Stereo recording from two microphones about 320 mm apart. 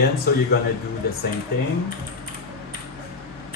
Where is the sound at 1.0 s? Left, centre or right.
Left.